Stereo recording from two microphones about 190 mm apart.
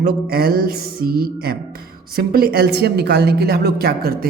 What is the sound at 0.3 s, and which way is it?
A man's voice, 50° right (ahead or behind).